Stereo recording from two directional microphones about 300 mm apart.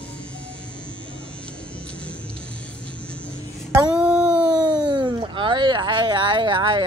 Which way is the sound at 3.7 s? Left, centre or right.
Centre.